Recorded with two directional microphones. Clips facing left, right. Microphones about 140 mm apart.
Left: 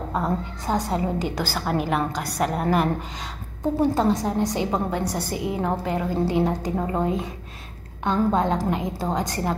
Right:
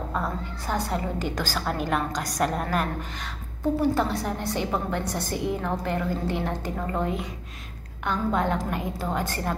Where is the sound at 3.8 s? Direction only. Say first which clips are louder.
Left 5 dB; 20° left (ahead or behind).